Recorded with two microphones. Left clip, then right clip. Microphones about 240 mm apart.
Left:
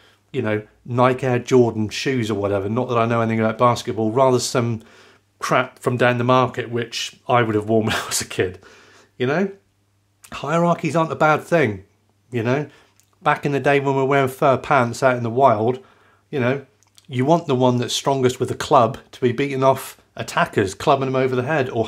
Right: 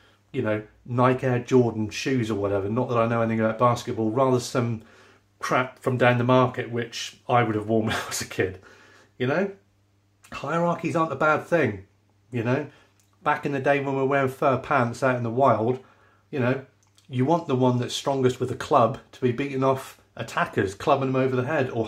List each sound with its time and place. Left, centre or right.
0.3 s speech: left